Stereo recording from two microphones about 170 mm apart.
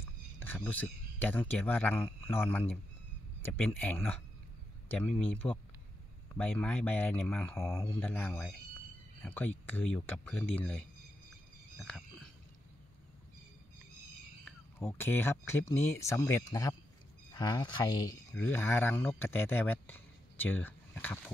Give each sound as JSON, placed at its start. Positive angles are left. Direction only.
{"t": 0.0, "sound": "speech", "side_deg": 10}
{"t": 4.8, "sound": "a sound", "side_deg": 10}
{"t": 5.2, "sound": "speech", "side_deg": 10}
{"t": 11.8, "sound": "a sound", "side_deg": 5}
{"t": 14.4, "sound": "speech", "side_deg": 15}
{"t": 18.3, "sound": "speech", "side_deg": 10}